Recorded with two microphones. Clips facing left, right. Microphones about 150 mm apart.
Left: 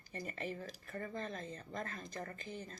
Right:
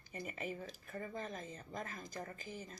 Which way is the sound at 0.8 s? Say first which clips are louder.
Left 2 dB; 55° left (ahead or behind).